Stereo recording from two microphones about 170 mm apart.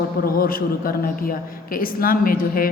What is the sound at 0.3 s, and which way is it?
A woman's voice, 60° left (ahead or behind).